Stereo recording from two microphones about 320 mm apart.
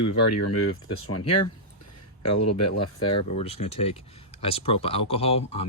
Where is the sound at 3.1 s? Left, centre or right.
Centre.